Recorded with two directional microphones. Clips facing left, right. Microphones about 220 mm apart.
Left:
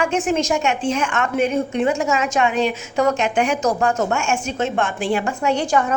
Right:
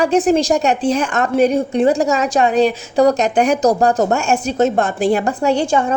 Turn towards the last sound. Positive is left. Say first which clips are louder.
# right 3 dB
turn(degrees=-30)  # may be behind; listen again after turning